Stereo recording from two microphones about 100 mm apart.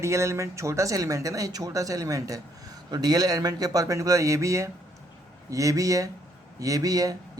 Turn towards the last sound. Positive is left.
turn(degrees=-35)  # may be behind; listen again after turning